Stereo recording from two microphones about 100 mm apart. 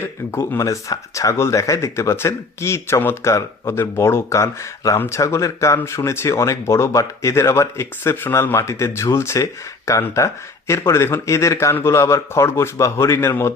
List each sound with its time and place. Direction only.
0.0 s speech: 25° left (ahead or behind)